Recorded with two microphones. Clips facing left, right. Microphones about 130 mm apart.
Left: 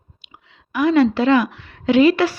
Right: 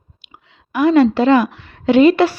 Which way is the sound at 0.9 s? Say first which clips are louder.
Right 3 dB; 45° right (ahead or behind).